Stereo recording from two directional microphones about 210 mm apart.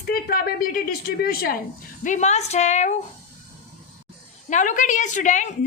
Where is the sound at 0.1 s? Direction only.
45° left (ahead or behind).